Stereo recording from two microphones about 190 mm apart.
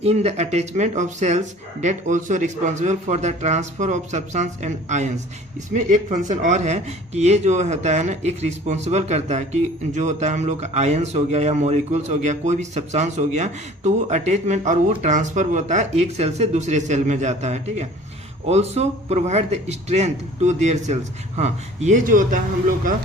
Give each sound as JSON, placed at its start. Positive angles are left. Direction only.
{"t": 0.0, "sound": "speech", "side_deg": -35}